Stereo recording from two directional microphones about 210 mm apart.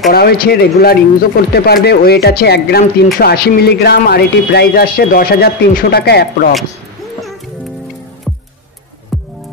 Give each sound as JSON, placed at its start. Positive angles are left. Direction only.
{"t": 0.1, "sound": "speech", "side_deg": 45}
{"t": 9.1, "sound": "music", "side_deg": 0}